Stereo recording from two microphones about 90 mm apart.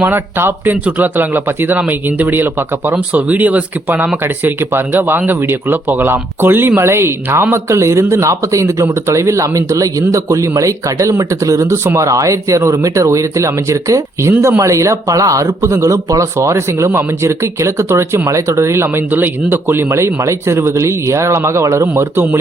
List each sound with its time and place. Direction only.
0.0 s speech: 25° right (ahead or behind)